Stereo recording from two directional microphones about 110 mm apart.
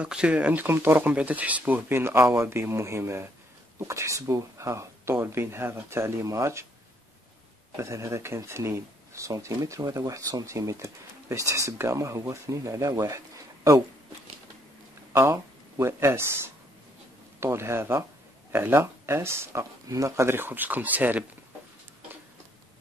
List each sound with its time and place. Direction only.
0.0 s speech: 10° right (ahead or behind); by 6.6 s 25° right (ahead or behind)
7.7 s speech: 25° right (ahead or behind)
15.1 s speech: 25° right (ahead or behind)